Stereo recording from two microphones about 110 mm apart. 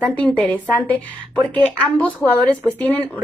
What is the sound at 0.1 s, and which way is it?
Speech, 15° left (ahead or behind).